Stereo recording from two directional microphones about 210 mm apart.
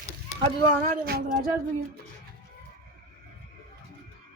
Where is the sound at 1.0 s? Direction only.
45° right (ahead or behind).